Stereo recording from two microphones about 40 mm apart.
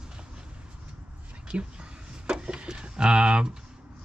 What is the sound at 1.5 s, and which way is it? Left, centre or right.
Speech, right.